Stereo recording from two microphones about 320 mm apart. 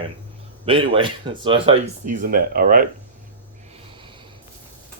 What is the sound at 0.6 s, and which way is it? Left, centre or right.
Speech, centre.